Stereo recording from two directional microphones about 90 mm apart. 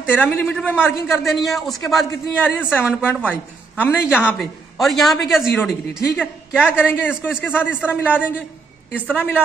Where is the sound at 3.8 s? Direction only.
20° left (ahead or behind).